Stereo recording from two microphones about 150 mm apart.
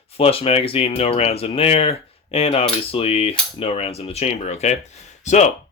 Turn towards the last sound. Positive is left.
turn(degrees=50)  # may be behind; listen again after turning